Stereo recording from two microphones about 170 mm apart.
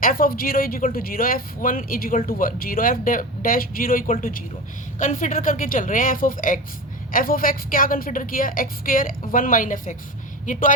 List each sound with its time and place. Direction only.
0.0 s speech: 55° left (ahead or behind)